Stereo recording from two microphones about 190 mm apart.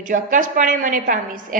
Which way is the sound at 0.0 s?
45° right (ahead or behind).